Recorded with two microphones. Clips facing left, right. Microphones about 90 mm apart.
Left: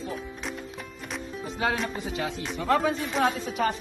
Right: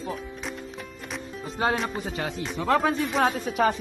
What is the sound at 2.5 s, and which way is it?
Speech, 85° right.